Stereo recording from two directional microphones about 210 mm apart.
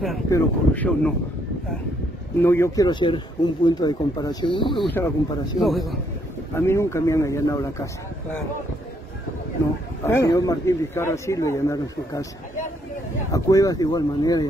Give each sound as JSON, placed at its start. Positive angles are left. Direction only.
{"t": 0.3, "sound": "speech", "side_deg": 5}
{"t": 2.4, "sound": "a man's voice", "side_deg": 10}
{"t": 5.6, "sound": "speech", "side_deg": 0}
{"t": 6.5, "sound": "a man's voice", "side_deg": 15}
{"t": 10.0, "sound": "a man's voice", "side_deg": 15}
{"t": 13.3, "sound": "a man's voice", "side_deg": 15}